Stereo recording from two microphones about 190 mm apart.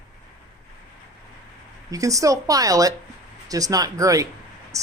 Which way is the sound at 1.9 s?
15° right (ahead or behind).